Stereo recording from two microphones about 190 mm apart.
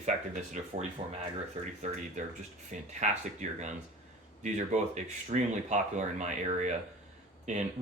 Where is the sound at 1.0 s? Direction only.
30° right (ahead or behind).